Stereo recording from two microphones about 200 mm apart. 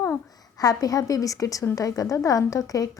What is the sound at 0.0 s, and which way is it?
A woman's voice, 15° left (ahead or behind).